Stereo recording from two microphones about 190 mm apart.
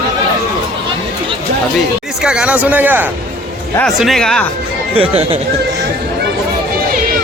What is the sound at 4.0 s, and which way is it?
Speech, centre (ahead or behind).